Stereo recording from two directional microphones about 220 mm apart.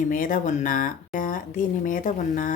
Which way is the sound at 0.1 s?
35° left (ahead or behind).